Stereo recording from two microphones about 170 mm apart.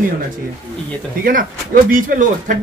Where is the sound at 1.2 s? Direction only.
55° right (ahead or behind).